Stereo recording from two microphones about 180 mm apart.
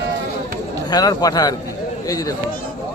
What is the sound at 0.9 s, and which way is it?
Speech, 20° left (ahead or behind).